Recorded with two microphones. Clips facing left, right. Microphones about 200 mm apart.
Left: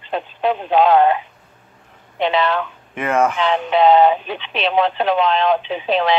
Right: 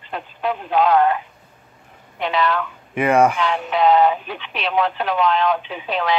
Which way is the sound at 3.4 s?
25° left (ahead or behind).